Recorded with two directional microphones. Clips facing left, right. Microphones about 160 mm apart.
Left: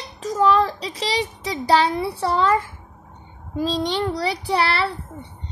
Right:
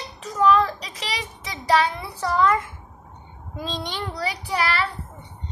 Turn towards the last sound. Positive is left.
turn(degrees=30)  # may be behind; listen again after turning